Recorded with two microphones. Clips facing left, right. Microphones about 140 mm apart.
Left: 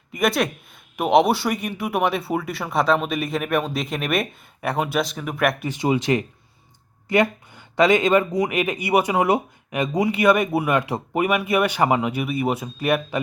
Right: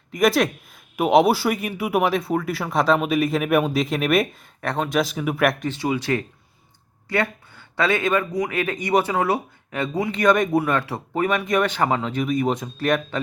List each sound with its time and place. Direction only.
0.1 s speech: centre (ahead or behind)
4.6 s speech: 10° left (ahead or behind)
4.9 s speech: 5° right (ahead or behind)
5.6 s speech: 15° left (ahead or behind)